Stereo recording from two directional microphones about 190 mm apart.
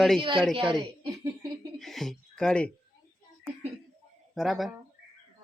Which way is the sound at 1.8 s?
Centre (ahead or behind).